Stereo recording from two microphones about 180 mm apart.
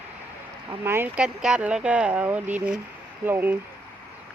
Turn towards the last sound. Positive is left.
turn(degrees=-10)  # may be behind; listen again after turning